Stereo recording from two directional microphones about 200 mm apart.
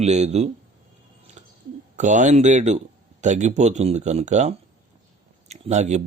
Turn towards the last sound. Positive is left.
turn(degrees=-35)  # may be behind; listen again after turning